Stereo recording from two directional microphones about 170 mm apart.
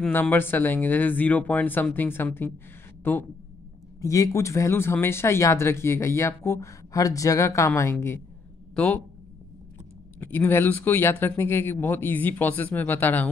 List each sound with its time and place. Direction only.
0.0 s speech: 10° left (ahead or behind)
10.2 s speech: 10° left (ahead or behind)